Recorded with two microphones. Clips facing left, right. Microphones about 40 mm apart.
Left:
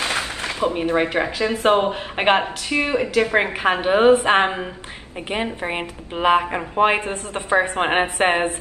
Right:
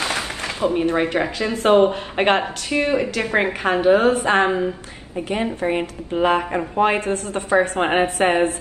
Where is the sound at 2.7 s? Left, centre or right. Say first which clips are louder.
Even; left.